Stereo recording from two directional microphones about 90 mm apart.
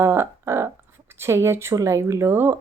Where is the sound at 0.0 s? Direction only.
25° right (ahead or behind).